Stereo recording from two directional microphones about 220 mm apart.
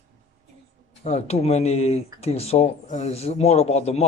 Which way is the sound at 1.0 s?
30° left (ahead or behind).